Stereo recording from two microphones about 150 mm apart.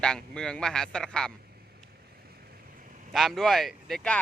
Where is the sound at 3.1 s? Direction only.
Centre (ahead or behind).